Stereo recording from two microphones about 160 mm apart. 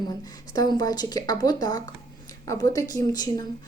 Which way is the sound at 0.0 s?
25° left (ahead or behind).